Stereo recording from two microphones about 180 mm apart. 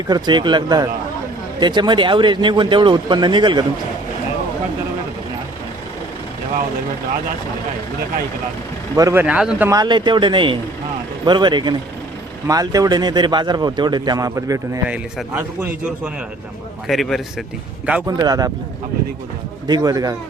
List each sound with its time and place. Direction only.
0.1 s a man's voice: 25° right (ahead or behind)
9.0 s speech: 20° right (ahead or behind)
9.2 s speech: 5° right (ahead or behind)
9.6 s a man's voice: 20° right (ahead or behind)
16.8 s a man's voice: centre (ahead or behind)
18.0 s a man's voice: 20° right (ahead or behind)
19.6 s a man's voice: 20° right (ahead or behind)